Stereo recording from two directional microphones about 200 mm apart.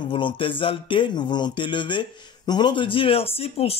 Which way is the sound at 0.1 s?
25° left (ahead or behind).